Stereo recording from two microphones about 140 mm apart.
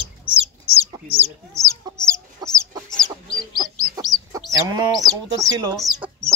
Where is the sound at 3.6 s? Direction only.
25° right (ahead or behind).